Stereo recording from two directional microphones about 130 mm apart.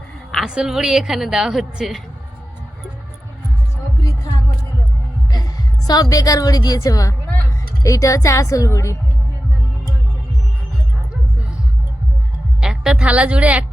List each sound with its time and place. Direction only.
0.3 s a woman's voice: centre (ahead or behind)
5.8 s a woman's voice: 30° left (ahead or behind)
12.5 s a woman's voice: 5° right (ahead or behind)